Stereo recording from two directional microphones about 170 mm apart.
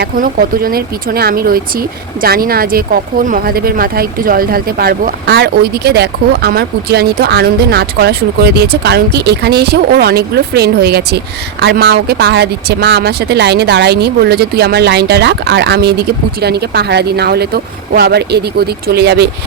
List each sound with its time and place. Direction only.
0.0 s speech: 60° right (ahead or behind)